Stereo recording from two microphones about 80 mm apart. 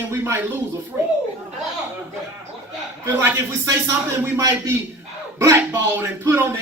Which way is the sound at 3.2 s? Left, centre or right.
Right.